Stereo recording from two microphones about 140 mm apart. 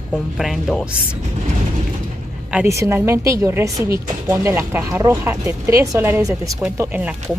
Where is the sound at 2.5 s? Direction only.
20° right (ahead or behind).